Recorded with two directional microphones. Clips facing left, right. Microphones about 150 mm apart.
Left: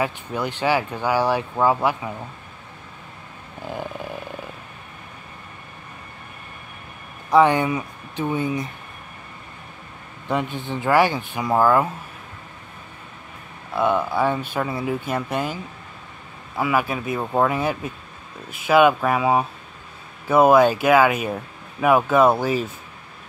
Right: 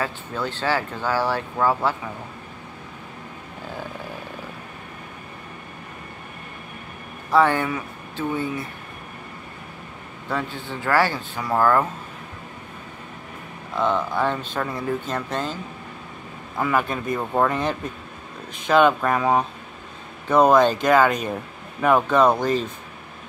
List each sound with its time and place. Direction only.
0.0 s speech: 15° left (ahead or behind)
7.2 s speech: 15° left (ahead or behind)
10.2 s speech: 20° left (ahead or behind)
13.7 s speech: 10° left (ahead or behind)